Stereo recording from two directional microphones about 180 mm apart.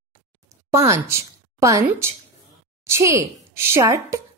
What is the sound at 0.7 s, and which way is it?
A woman's voice, 15° right (ahead or behind).